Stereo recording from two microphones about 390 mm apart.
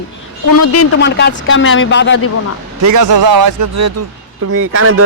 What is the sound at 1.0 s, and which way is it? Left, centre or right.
Speech, left.